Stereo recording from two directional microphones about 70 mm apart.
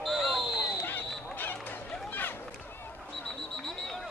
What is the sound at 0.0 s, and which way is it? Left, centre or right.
Basketball bounce, centre.